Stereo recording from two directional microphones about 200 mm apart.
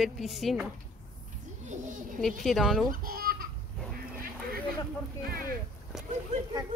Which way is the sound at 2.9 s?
45° right (ahead or behind).